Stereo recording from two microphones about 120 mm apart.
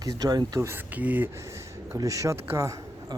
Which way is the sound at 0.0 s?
30° right (ahead or behind).